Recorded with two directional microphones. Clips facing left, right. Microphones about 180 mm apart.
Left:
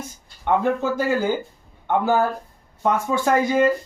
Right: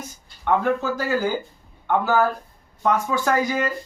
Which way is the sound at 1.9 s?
20° left (ahead or behind).